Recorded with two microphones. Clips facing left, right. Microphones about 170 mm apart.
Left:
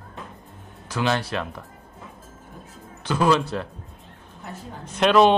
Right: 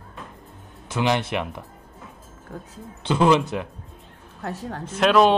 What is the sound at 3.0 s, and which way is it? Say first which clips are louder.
Speech: right 2 dB; 20° right (ahead or behind).